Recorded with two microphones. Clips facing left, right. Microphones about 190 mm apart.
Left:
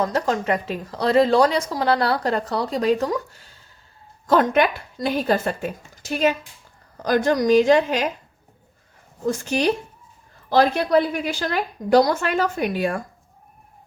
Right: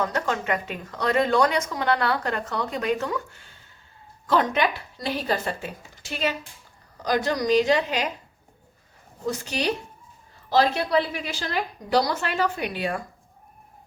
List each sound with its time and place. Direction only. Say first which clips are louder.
0.0 s speech: left 4 dB; 35° left (ahead or behind)
4.3 s a woman's voice: left 5 dB; 50° left (ahead or behind)
9.2 s a woman's voice: left 6 dB; 50° left (ahead or behind)